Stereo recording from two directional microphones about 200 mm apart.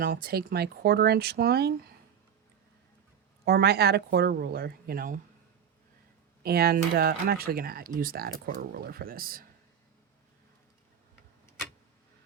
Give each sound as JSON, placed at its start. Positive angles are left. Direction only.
{"t": 0.0, "sound": "speech", "side_deg": -45}
{"t": 3.4, "sound": "speech", "side_deg": -50}
{"t": 6.4, "sound": "speech", "side_deg": -50}